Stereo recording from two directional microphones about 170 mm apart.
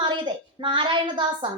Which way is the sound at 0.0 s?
25° right (ahead or behind).